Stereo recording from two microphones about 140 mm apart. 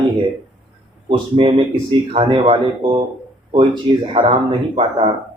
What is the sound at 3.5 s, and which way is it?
Speech, 35° right (ahead or behind).